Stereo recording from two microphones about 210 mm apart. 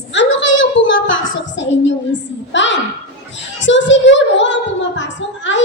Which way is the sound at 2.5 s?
60° left (ahead or behind).